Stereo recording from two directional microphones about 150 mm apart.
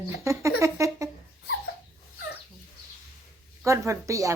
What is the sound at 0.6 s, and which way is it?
Speech, 20° right (ahead or behind).